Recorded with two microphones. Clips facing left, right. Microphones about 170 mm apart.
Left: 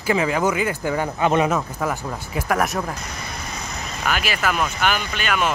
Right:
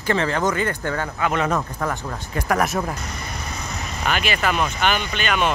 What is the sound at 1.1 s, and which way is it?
Speech, 20° left (ahead or behind).